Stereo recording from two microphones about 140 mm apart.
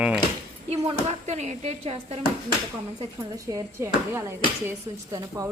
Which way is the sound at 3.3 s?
25° right (ahead or behind).